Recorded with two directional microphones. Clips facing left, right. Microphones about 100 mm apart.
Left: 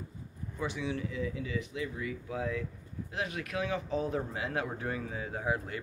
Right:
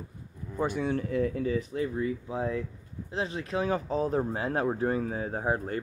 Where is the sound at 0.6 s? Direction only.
50° right (ahead or behind).